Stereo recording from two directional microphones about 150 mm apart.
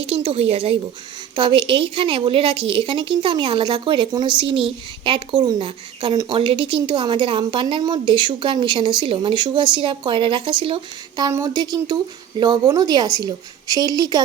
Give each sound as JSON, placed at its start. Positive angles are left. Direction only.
{"t": 0.0, "sound": "speech", "side_deg": -40}
{"t": 11.2, "sound": "a woman's voice", "side_deg": -20}